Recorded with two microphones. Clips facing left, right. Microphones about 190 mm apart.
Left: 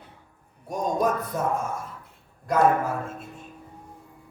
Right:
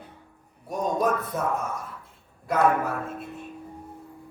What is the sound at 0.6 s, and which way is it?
Speech, centre (ahead or behind).